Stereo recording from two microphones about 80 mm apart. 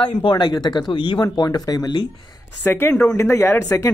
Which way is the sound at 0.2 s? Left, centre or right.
Left.